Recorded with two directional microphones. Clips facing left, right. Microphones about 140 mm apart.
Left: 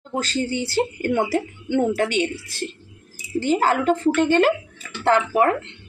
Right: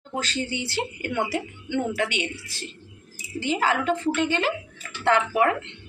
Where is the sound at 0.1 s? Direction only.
40° left (ahead or behind).